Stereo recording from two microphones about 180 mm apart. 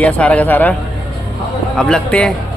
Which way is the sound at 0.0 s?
5° left (ahead or behind).